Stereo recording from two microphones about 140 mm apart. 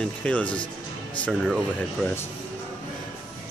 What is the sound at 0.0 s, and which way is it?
Speech, 10° left (ahead or behind).